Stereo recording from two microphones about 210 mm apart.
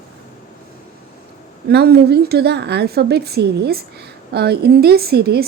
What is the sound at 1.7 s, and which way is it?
A woman's voice, 50° right (ahead or behind).